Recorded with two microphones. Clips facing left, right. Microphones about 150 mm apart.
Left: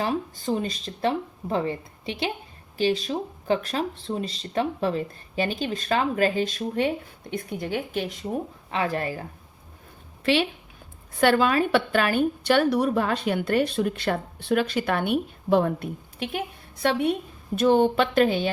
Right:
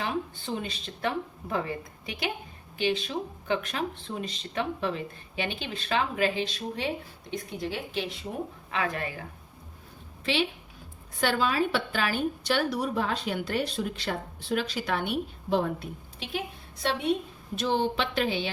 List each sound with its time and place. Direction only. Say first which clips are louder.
0.0 s speech: left 5 dB; 40° left (ahead or behind)
8.7 s speech: left 5 dB; 30° left (ahead or behind)
11.2 s a woman's voice: left 6 dB; 60° left (ahead or behind)
17.5 s a woman's voice: left 8 dB; 50° left (ahead or behind)